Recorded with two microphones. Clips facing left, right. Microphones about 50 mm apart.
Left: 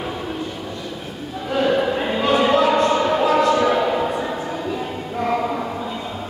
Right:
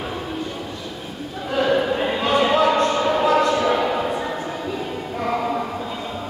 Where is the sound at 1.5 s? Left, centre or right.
Centre.